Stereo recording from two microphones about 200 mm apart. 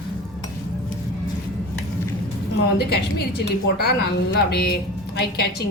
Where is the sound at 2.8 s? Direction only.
55° left (ahead or behind).